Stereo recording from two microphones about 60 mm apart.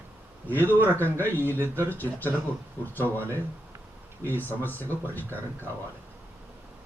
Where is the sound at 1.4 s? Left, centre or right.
Left.